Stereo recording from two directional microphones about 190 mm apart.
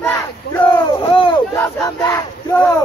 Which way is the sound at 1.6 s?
15° left (ahead or behind).